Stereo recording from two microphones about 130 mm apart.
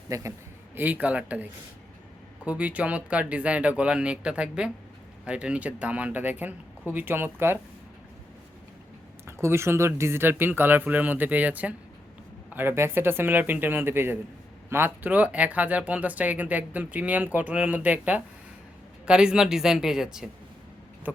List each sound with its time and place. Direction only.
0.1 s speech: 25° right (ahead or behind)
0.8 s speech: 15° right (ahead or behind)
9.2 s speech: 20° right (ahead or behind); by 20.3 s 5° right (ahead or behind)